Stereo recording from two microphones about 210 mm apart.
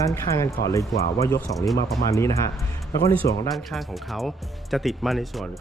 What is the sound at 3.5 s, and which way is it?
Speech, centre (ahead or behind).